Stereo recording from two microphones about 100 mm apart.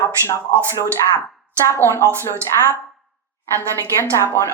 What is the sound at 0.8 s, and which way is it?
A woman's voice, 30° left (ahead or behind).